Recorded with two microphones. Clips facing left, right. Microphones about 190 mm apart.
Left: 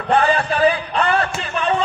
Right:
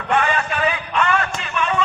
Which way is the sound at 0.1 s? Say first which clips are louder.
Left 3 dB; 35° left (ahead or behind).